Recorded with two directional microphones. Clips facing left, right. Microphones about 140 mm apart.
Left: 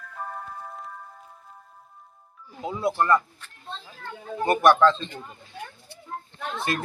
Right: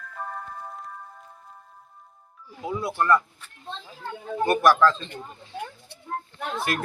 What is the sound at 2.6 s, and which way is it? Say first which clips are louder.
Speech: even; 25° left (ahead or behind).